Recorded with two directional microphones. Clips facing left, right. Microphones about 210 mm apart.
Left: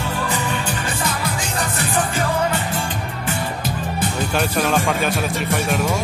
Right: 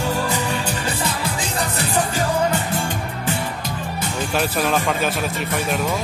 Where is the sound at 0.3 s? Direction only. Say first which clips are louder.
Even; 40° right (ahead or behind).